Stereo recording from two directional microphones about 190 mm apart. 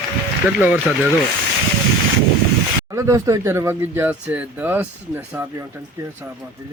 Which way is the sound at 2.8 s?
15° right (ahead or behind).